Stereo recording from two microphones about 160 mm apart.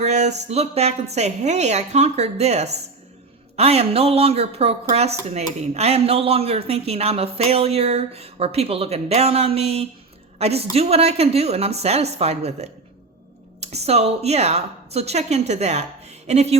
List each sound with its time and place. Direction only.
0.0 s a woman's voice: 45° right (ahead or behind)